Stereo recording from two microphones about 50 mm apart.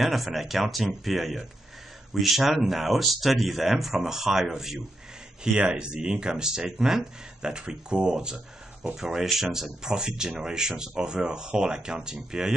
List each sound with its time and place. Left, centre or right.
0.0 s speech: centre
5.4 s speech: centre